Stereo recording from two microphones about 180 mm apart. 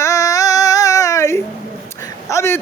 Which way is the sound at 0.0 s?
15° left (ahead or behind).